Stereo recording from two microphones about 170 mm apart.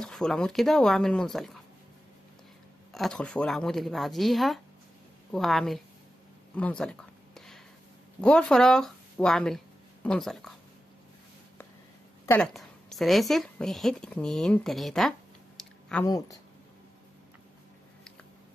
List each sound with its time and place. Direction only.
0.0 s speech: 5° left (ahead or behind)
2.9 s speech: 5° left (ahead or behind)
6.5 s a sound: 5° left (ahead or behind)
8.2 s speech: 5° left (ahead or behind)
12.3 s a woman's voice: 5° left (ahead or behind)
16.1 s speech: 20° left (ahead or behind)